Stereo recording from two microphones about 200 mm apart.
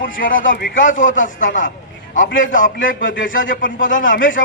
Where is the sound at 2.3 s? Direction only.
70° left (ahead or behind).